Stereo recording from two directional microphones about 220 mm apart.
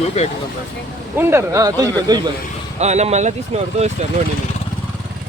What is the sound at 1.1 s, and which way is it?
Speech, 10° right (ahead or behind).